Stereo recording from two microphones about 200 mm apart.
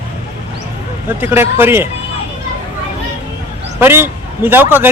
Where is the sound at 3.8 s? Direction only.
10° right (ahead or behind).